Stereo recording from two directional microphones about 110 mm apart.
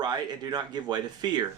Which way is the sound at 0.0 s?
40° right (ahead or behind).